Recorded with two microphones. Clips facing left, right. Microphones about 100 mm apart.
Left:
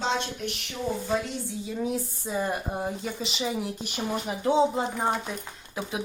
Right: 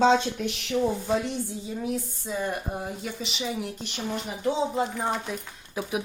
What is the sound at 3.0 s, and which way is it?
Speech, centre (ahead or behind).